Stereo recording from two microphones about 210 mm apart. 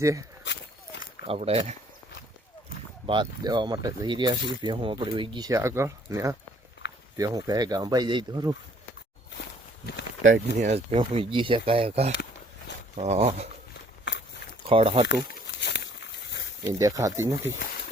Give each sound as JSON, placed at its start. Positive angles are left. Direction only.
{"t": 0.0, "sound": "speech", "side_deg": -15}
{"t": 1.2, "sound": "speech", "side_deg": -30}
{"t": 3.1, "sound": "speech", "side_deg": -20}
{"t": 6.8, "sound": "a sound", "side_deg": 55}
{"t": 7.2, "sound": "speech", "side_deg": -15}
{"t": 10.6, "sound": "speech", "side_deg": -30}
{"t": 14.7, "sound": "speech", "side_deg": -25}
{"t": 15.0, "sound": "a sound", "side_deg": 55}
{"t": 16.6, "sound": "speech", "side_deg": -15}